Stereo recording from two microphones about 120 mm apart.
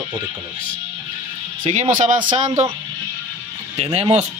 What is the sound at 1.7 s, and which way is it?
Speech, 90° right.